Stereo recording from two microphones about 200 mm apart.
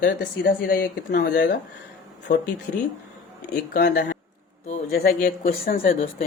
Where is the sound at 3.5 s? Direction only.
55° left (ahead or behind).